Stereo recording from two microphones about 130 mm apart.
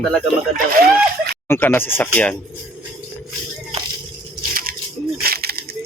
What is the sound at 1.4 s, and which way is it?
Speech, 15° left (ahead or behind).